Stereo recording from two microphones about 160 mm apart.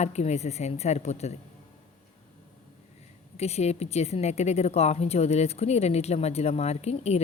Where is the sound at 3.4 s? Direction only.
40° left (ahead or behind).